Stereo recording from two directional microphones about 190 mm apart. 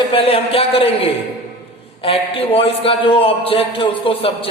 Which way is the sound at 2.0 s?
30° left (ahead or behind).